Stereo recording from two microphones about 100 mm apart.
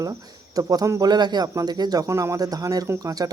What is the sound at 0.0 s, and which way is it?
Speech, 35° right (ahead or behind).